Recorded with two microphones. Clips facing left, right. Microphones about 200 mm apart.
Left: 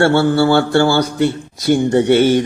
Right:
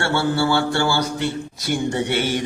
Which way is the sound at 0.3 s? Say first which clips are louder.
Left 7 dB; 50° left (ahead or behind).